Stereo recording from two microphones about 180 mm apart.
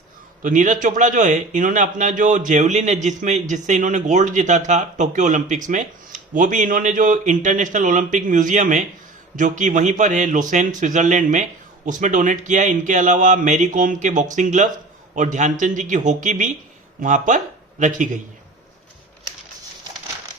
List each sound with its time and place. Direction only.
0.4 s a man's voice: 45° right (ahead or behind)